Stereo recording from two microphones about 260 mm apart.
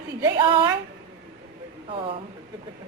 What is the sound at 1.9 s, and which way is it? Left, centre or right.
Speech, right.